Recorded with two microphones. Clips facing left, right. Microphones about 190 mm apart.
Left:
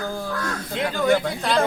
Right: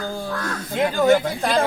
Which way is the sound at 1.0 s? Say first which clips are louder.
Right 2 dB; 45° right (ahead or behind).